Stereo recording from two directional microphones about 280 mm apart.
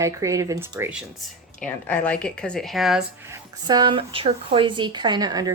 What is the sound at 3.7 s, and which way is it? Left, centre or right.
Speech, centre.